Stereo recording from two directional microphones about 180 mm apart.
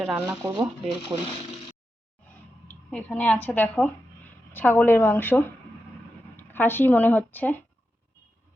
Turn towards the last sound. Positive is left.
turn(degrees=10)  # may be behind; listen again after turning